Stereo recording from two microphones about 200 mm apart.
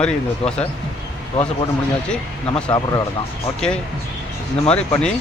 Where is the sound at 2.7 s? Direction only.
20° left (ahead or behind).